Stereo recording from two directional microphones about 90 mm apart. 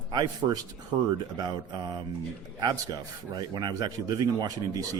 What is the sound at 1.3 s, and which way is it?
Speech, 50° right (ahead or behind).